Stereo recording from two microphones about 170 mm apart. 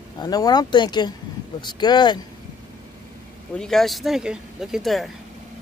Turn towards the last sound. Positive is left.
turn(degrees=0)  # may be behind; listen again after turning